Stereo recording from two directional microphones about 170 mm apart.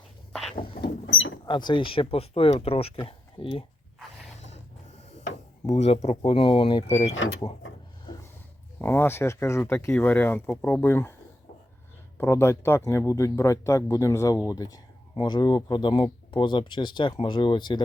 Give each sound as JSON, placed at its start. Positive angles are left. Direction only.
{"t": 0.8, "sound": "vehicle", "side_deg": 75}
{"t": 1.5, "sound": "speech", "side_deg": 25}
{"t": 4.4, "sound": "a sound", "side_deg": 40}
{"t": 5.6, "sound": "speech", "side_deg": 40}
{"t": 8.1, "sound": "a sound", "side_deg": 25}
{"t": 8.8, "sound": "speech", "side_deg": 10}
{"t": 12.1, "sound": "speech", "side_deg": 15}